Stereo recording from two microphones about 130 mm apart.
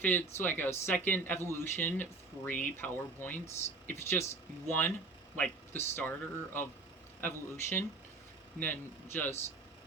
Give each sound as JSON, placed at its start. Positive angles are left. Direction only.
{"t": 0.0, "sound": "speech", "side_deg": 15}